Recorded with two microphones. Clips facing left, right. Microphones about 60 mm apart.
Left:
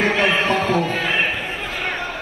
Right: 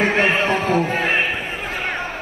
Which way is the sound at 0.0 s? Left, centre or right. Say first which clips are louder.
Right 1 dB; right.